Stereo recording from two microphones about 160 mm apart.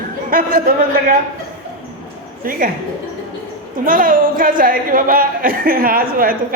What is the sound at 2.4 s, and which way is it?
Speech, 60° right (ahead or behind).